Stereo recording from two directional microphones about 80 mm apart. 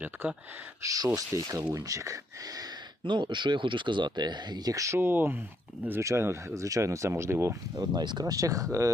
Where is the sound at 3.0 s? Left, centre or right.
Right.